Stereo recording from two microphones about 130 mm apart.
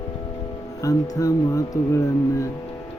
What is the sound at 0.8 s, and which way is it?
Music, 25° left (ahead or behind).